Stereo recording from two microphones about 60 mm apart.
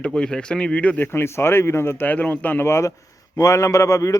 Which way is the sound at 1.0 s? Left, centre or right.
Left.